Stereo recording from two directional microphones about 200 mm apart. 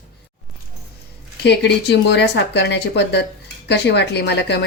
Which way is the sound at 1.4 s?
55° left (ahead or behind).